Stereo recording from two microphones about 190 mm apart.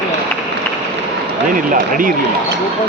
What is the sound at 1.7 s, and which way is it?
Speech, 45° right (ahead or behind).